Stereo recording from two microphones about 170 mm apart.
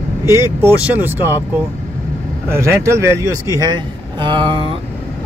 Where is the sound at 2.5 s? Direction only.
15° right (ahead or behind).